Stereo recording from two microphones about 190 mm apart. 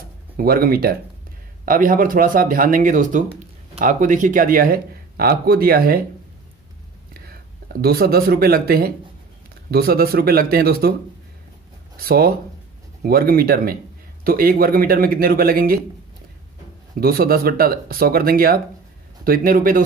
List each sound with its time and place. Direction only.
0.4 s speech: 50° right (ahead or behind)
7.2 s speech: 55° right (ahead or behind)
12.0 s speech: 50° right (ahead or behind)
17.0 s speech: 50° right (ahead or behind)